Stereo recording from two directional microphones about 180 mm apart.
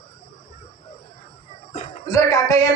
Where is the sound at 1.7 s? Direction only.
40° left (ahead or behind).